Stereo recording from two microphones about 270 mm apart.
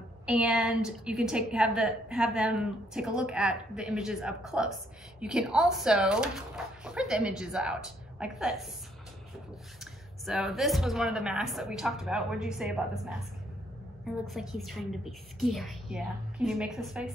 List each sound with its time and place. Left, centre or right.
0.3 s a woman's voice: centre
10.2 s a woman's voice: centre